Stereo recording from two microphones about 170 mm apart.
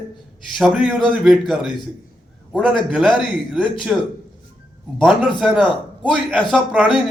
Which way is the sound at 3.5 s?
Centre (ahead or behind).